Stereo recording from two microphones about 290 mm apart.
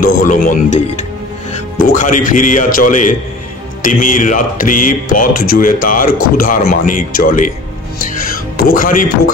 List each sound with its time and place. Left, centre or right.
0.0 s a man's voice: left
8.5 s a man's voice: left